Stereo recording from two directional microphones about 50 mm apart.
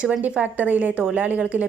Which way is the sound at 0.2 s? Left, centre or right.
Right.